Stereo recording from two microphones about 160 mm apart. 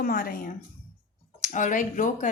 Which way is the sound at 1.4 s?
50° left (ahead or behind).